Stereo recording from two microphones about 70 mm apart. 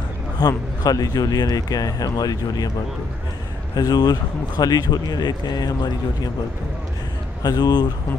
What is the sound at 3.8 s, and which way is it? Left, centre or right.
Speech, left.